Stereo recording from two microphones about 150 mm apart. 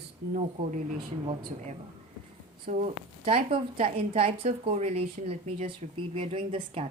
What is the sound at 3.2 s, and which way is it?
A woman's voice, 40° right (ahead or behind).